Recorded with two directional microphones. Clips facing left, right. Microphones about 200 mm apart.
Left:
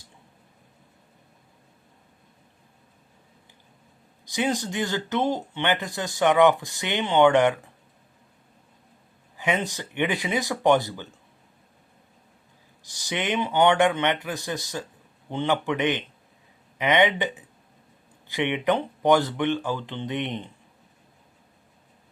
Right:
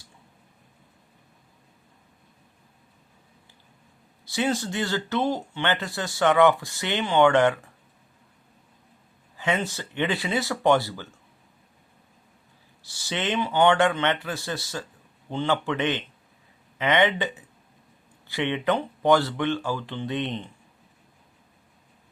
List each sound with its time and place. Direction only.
4.3 s speech: 15° left (ahead or behind)
9.4 s speech: 15° left (ahead or behind)
12.8 s speech: 15° left (ahead or behind)